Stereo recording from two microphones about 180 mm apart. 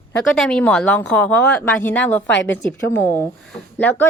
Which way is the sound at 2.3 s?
85° left.